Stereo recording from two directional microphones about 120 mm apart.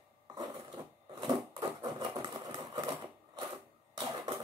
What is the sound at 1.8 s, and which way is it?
Engine, 35° right (ahead or behind).